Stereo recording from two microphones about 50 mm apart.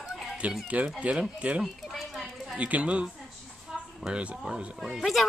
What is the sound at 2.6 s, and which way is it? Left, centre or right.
Speech, right.